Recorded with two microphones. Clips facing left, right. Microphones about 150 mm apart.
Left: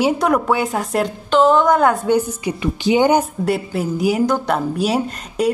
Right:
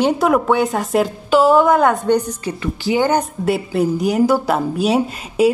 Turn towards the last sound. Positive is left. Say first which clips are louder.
# right 4 dB
turn(degrees=0)  # may be behind; listen again after turning